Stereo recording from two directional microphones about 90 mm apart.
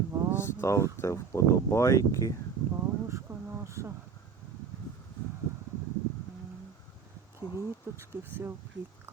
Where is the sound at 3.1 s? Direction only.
30° right (ahead or behind).